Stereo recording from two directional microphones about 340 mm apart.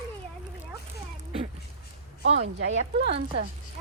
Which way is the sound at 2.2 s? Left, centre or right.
Right.